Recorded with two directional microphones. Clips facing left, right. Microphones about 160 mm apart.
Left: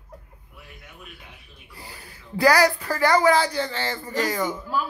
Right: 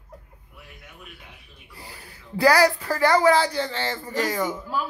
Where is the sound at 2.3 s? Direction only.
30° right (ahead or behind).